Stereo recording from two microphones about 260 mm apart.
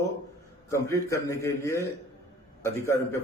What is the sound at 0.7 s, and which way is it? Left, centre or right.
A man's voice, centre.